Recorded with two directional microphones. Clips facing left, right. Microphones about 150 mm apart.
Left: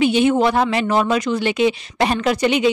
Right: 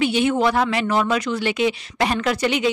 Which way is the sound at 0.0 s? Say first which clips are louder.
Left 3 dB; 20° left (ahead or behind).